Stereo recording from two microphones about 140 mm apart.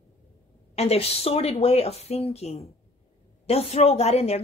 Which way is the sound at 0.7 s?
45° left (ahead or behind).